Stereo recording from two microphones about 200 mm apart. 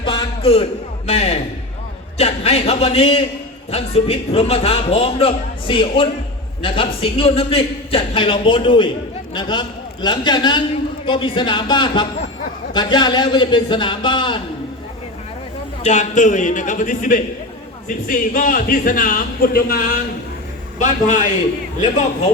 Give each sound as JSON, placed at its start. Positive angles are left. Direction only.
{"t": 0.0, "sound": "a sound", "side_deg": 25}
{"t": 2.1, "sound": "a man's voice", "side_deg": 30}
{"t": 15.8, "sound": "a man's voice", "side_deg": 35}